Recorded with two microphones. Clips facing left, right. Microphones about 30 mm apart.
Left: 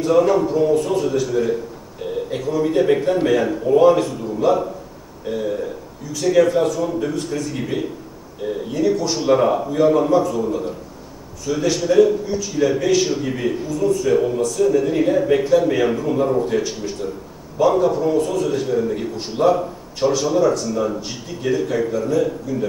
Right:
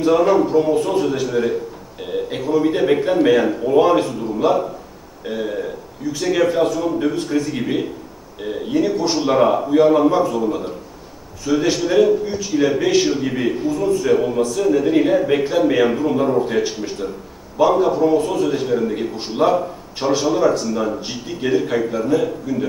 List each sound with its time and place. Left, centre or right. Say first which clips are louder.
0.0 s a man's voice: right 1 dB; centre